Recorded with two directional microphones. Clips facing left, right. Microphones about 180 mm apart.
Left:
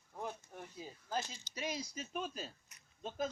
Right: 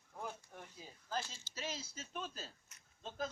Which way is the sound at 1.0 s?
15° left (ahead or behind).